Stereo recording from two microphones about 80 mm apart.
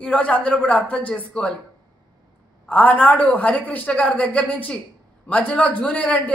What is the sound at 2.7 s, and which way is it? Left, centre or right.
A man's voice, centre.